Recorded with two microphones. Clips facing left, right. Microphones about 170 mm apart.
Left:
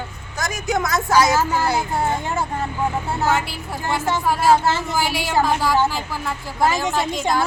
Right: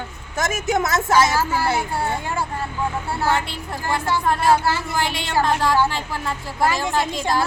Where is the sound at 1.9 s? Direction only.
20° left (ahead or behind).